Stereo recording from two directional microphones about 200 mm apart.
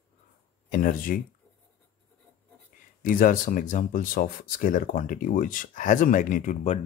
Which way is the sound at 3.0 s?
45° left (ahead or behind).